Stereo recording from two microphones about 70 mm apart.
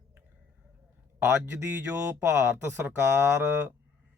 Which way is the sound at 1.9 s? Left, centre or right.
Right.